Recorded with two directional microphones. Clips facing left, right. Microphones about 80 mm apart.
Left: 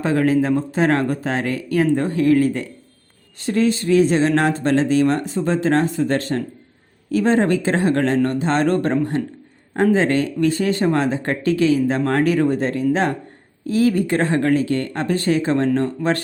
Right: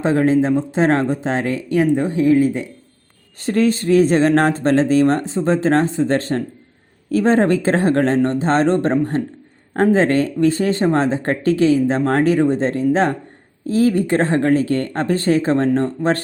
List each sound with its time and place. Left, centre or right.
0.0 s speech: right
3.3 s speech: right